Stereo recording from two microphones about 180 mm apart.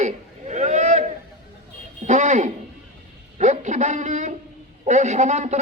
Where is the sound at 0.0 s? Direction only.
40° right (ahead or behind).